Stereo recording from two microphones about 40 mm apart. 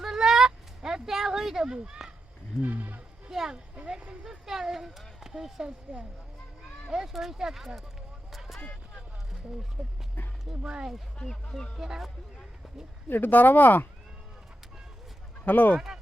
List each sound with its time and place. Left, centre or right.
0.0 s a sound: centre
2.6 s speech: right
3.2 s speech: centre
5.9 s speech: right
6.9 s speech: centre
8.3 s a sound: centre
9.8 s speech: right
11.8 s speech: centre
13.1 s speech: left
15.4 s speech: left